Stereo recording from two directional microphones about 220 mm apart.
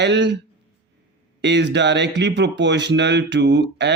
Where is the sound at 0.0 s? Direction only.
50° right (ahead or behind).